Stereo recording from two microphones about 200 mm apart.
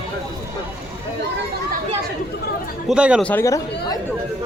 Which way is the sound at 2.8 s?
5° right (ahead or behind).